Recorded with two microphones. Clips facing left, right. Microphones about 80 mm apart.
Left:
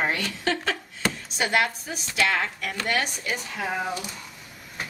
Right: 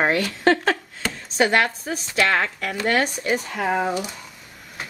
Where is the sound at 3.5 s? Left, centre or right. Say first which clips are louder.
Right 6 dB; right.